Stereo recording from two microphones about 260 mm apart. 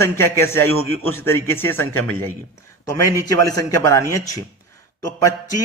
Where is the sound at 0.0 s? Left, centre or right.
Centre.